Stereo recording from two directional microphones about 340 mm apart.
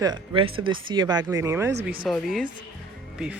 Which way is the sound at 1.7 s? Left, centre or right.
Right.